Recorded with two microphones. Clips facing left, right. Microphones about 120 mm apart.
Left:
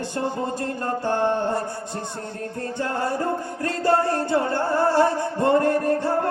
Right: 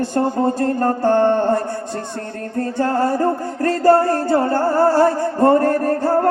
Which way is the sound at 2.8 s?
45° right (ahead or behind).